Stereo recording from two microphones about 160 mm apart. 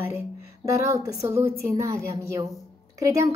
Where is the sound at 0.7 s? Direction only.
20° right (ahead or behind).